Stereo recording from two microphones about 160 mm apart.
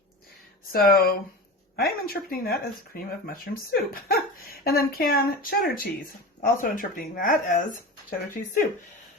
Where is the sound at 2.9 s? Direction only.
65° left (ahead or behind).